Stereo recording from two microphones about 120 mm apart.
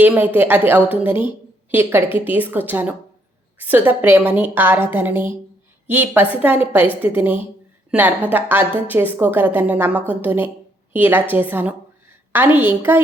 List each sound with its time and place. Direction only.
0.0 s a woman's voice: 15° right (ahead or behind)